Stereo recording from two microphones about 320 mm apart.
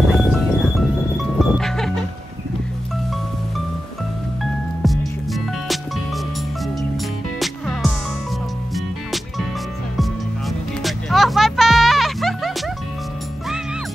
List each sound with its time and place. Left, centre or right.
0.1 s music: centre
4.4 s music: centre
7.3 s music: centre
10.8 s music: centre